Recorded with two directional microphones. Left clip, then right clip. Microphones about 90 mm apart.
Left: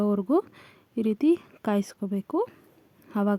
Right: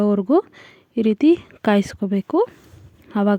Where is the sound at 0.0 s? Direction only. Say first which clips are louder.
Right 7 dB; 30° right (ahead or behind).